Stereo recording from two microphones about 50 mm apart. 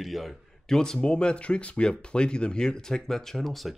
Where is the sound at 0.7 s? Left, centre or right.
Centre.